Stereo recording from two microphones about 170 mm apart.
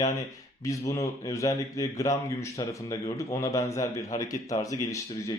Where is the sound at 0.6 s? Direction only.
20° left (ahead or behind).